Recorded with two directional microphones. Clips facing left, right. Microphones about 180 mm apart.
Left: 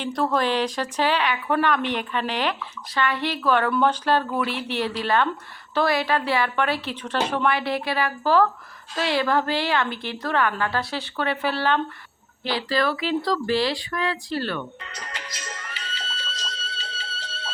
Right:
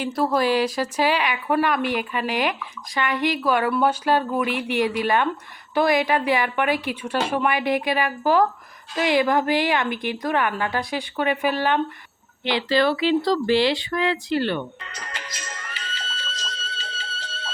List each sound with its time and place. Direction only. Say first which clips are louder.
0.0 s a woman's voice: right 2 dB; 5° right (ahead or behind); by 14.6 s 25° right (ahead or behind)
14.9 s music: right 1 dB; 50° right (ahead or behind)